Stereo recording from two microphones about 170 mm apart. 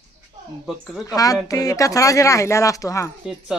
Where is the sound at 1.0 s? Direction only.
20° left (ahead or behind).